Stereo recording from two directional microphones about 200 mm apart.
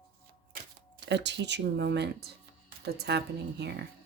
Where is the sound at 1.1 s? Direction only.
60° right (ahead or behind).